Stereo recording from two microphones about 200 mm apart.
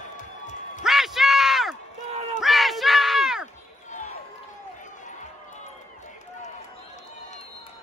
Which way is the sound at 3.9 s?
35° left (ahead or behind).